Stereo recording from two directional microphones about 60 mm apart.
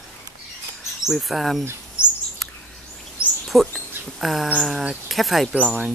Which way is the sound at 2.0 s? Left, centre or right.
Left.